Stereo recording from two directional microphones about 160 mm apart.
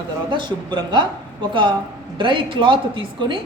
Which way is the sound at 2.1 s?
30° right (ahead or behind).